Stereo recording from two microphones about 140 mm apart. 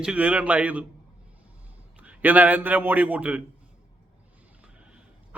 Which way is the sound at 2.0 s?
10° right (ahead or behind).